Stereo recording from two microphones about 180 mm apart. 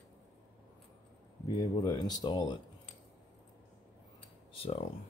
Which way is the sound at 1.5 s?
25° left (ahead or behind).